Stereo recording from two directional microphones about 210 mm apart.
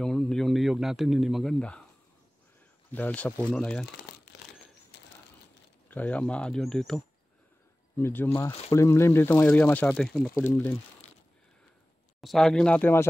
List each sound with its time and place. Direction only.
0.0 s speech: 5° left (ahead or behind)
2.9 s speech: 5° left (ahead or behind)
4.9 s bird: 55° left (ahead or behind)
5.9 s speech: 5° left (ahead or behind)
8.0 s speech: 10° left (ahead or behind)
8.5 s speech: 30° left (ahead or behind)
8.7 s speech: 10° left (ahead or behind)
12.2 s speech: centre (ahead or behind)